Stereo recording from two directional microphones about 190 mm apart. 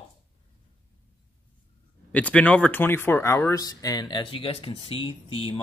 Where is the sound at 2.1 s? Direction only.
5° left (ahead or behind); by 5.6 s 30° left (ahead or behind).